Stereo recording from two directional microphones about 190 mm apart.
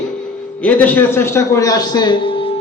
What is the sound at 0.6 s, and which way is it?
A man's voice, 10° left (ahead or behind).